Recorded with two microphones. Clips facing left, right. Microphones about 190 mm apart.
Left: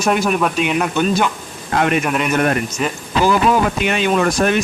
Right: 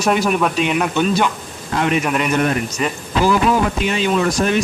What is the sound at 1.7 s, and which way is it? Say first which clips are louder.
Speech: left 1 dB; 55° left (ahead or behind).